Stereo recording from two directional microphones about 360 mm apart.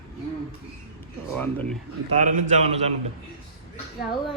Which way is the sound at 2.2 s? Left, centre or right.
Right.